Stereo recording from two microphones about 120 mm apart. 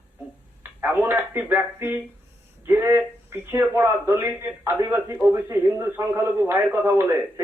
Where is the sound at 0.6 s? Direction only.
15° right (ahead or behind).